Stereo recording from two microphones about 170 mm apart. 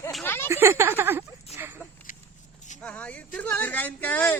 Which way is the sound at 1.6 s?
15° right (ahead or behind).